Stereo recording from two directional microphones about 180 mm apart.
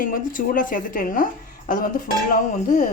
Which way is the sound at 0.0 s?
50° left (ahead or behind).